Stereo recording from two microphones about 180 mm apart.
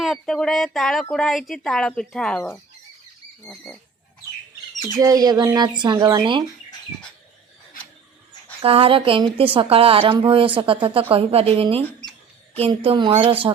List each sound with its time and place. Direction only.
0.0 s speech: centre (ahead or behind)
4.9 s speech: 20° right (ahead or behind)
8.6 s a woman's voice: 30° right (ahead or behind)